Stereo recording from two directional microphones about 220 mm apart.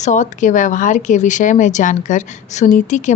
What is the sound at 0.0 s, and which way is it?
Speech, 35° left (ahead or behind).